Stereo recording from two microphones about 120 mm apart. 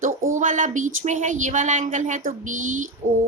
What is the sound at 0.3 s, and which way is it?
Speech, 90° right.